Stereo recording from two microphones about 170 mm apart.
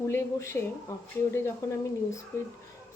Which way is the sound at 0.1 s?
15° left (ahead or behind).